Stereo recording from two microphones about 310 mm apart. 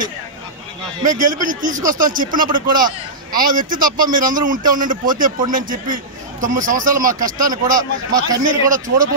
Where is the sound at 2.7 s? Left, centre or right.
Centre.